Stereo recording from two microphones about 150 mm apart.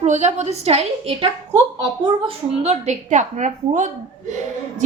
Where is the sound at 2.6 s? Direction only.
50° right (ahead or behind).